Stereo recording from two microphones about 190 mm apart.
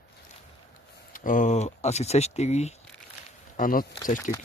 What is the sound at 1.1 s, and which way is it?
Speech, 45° left (ahead or behind).